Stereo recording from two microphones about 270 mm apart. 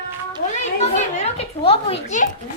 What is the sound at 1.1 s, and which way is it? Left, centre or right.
A woman's voice, left.